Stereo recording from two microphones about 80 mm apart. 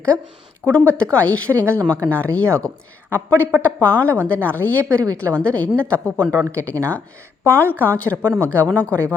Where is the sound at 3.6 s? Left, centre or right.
Centre.